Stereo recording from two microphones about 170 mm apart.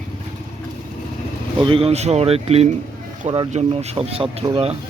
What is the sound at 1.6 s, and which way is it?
Speech, 30° right (ahead or behind).